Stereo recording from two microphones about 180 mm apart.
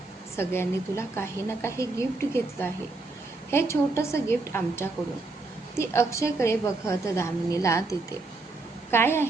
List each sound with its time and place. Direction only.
0.3 s a woman's voice: 15° left (ahead or behind)